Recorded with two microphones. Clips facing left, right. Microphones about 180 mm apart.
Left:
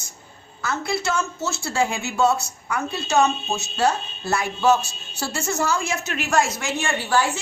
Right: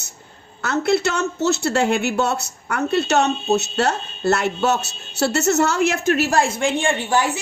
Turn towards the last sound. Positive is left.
turn(degrees=-20)  # may be behind; listen again after turning